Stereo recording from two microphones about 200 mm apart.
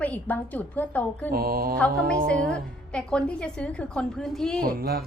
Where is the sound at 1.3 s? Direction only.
50° right (ahead or behind).